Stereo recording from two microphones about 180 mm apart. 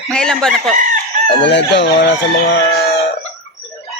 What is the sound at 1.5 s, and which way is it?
Chicken, 75° left (ahead or behind).